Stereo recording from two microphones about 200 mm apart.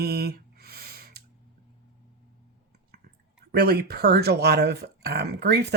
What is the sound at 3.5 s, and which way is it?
Speech, 50° right (ahead or behind).